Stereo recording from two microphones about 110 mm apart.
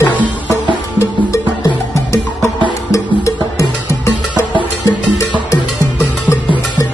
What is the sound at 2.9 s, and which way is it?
Music, 30° left (ahead or behind).